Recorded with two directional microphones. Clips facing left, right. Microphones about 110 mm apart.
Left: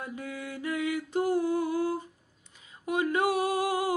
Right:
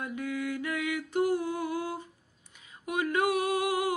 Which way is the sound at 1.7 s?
20° right (ahead or behind).